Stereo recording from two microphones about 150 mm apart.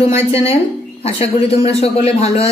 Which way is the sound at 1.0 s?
40° left (ahead or behind).